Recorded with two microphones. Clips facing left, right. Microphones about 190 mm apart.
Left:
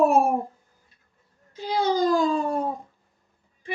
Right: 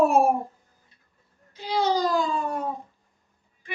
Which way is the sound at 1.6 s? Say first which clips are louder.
Left 2 dB; 50° left (ahead or behind).